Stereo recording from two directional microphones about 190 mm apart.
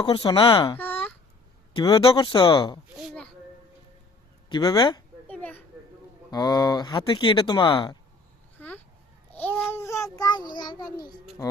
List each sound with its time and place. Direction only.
0.0 s speech: 25° left (ahead or behind)
0.8 s a sound: 10° left (ahead or behind)
1.7 s speech: 25° left (ahead or behind)
2.9 s a child's voice: centre (ahead or behind)
4.4 s speech: 20° left (ahead or behind)
5.3 s a sound: 10° left (ahead or behind)
6.3 s speech: 20° left (ahead or behind)
8.5 s a sound: 10° left (ahead or behind)
9.3 s child singing: 10° left (ahead or behind)